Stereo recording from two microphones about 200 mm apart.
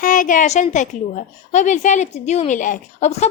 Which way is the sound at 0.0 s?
40° left (ahead or behind).